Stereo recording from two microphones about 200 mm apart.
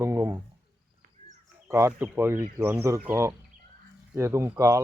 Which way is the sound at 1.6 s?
15° right (ahead or behind).